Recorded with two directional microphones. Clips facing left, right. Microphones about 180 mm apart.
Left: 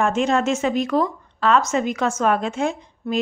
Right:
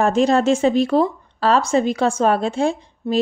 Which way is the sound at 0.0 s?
35° right (ahead or behind).